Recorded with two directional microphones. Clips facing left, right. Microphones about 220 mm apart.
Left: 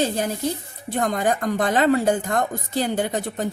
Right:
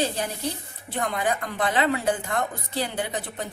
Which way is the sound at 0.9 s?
40° left (ahead or behind).